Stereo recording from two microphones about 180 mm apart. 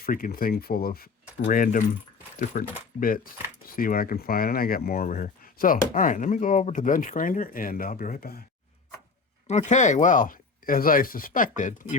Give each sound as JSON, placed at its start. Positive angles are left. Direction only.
{"t": 0.0, "sound": "speech", "side_deg": 50}
{"t": 3.8, "sound": "speech", "side_deg": 55}
{"t": 9.5, "sound": "speech", "side_deg": 40}